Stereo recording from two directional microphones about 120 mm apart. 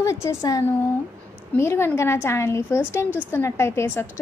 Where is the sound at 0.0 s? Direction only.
25° left (ahead or behind).